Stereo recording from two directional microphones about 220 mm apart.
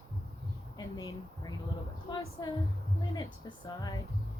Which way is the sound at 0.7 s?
15° left (ahead or behind).